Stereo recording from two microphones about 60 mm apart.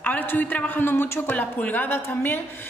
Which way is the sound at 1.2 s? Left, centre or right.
Left.